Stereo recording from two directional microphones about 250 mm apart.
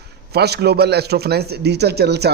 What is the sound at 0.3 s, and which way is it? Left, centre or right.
A man's voice, right.